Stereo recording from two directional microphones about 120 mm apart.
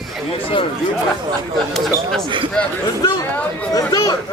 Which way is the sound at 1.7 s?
Centre (ahead or behind).